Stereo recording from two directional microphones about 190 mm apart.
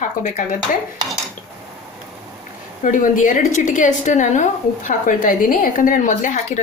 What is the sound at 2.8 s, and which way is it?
A woman's voice, 45° left (ahead or behind).